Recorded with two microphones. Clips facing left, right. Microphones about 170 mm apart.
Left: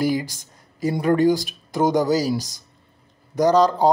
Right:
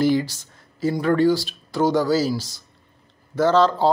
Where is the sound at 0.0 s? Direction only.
10° left (ahead or behind).